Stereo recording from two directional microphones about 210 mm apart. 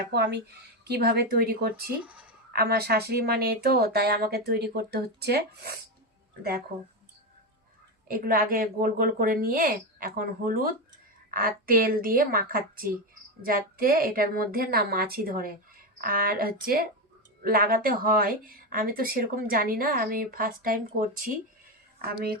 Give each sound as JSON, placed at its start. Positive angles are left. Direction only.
{"t": 0.1, "sound": "speech", "side_deg": -55}
{"t": 8.0, "sound": "speech", "side_deg": -45}